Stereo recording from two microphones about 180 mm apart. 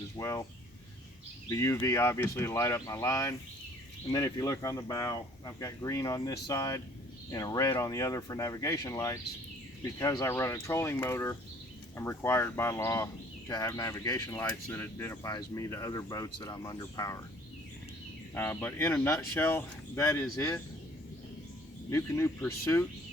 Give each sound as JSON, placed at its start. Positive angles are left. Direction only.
{"t": 0.2, "sound": "speech", "side_deg": 15}
{"t": 1.5, "sound": "speech", "side_deg": 15}
{"t": 18.3, "sound": "speech", "side_deg": 10}
{"t": 21.8, "sound": "speech", "side_deg": 15}